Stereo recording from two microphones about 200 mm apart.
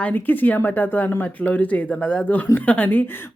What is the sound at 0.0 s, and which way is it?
A woman's voice, 10° left (ahead or behind).